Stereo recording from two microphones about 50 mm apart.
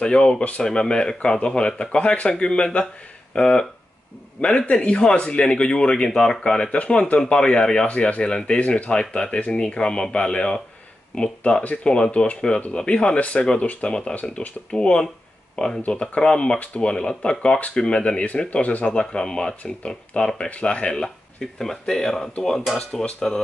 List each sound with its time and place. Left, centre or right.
0.0 s speech: centre
7.8 s speech: left
18.9 s speech: centre
20.4 s speech: left
20.9 s speech: centre